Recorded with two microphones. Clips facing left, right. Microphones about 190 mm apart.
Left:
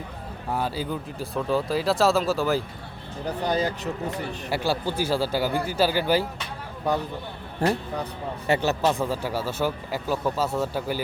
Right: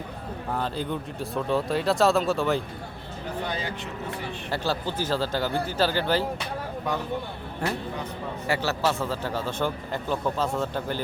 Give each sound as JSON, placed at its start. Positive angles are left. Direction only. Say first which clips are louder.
{"t": 0.5, "sound": "speech", "louder": "left 2 dB", "side_deg": 5}
{"t": 3.4, "sound": "speech", "louder": "left 8 dB", "side_deg": 40}
{"t": 4.5, "sound": "a man's voice", "louder": "left 3 dB", "side_deg": 10}
{"t": 7.6, "sound": "speech", "louder": "left 6 dB", "side_deg": 35}
{"t": 8.4, "sound": "a man's voice", "louder": "left 3 dB", "side_deg": 20}